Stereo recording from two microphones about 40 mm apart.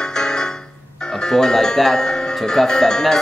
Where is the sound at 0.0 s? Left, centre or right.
Centre.